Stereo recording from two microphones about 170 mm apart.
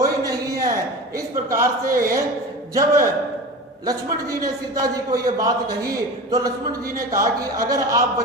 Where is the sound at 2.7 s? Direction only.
20° right (ahead or behind).